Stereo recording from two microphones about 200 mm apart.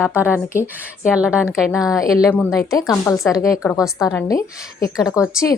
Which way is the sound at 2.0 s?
15° left (ahead or behind).